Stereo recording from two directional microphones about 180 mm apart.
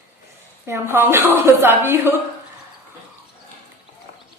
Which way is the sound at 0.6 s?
15° right (ahead or behind).